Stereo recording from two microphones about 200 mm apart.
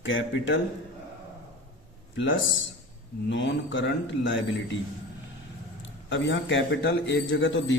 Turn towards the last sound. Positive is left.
turn(degrees=65)  # may be behind; listen again after turning